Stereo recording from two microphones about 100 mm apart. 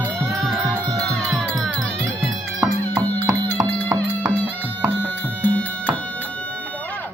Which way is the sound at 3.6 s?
35° right (ahead or behind).